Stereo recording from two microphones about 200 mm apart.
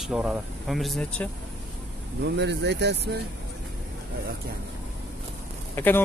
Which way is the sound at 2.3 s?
60° right (ahead or behind).